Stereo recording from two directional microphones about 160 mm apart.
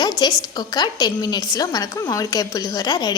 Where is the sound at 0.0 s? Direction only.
25° left (ahead or behind).